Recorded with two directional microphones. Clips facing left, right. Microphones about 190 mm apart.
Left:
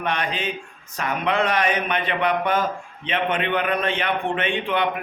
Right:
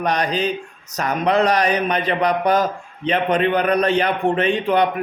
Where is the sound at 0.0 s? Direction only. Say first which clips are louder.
Right 5 dB; 40° right (ahead or behind).